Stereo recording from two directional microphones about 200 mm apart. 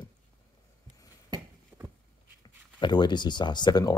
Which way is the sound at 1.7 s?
10° right (ahead or behind).